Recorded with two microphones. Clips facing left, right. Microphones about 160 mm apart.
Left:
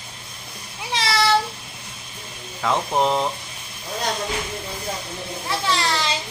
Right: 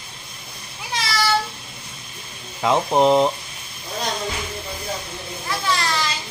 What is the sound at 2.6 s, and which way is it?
Speech, 20° right (ahead or behind).